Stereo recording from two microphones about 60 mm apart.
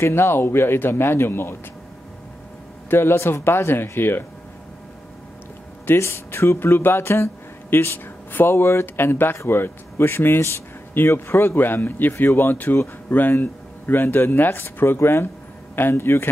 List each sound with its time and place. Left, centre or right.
0.0 s speech: left
2.9 s speech: left
5.9 s speech: left